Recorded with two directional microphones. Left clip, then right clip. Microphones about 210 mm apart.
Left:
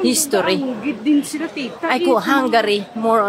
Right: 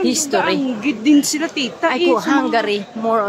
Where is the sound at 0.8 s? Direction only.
45° right (ahead or behind).